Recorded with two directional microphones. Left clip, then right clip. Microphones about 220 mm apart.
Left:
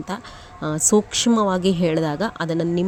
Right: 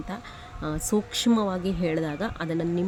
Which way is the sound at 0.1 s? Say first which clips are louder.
Left 6 dB; 25° left (ahead or behind).